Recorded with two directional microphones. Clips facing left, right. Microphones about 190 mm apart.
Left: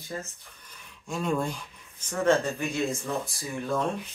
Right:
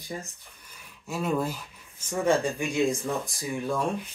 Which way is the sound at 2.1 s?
10° right (ahead or behind).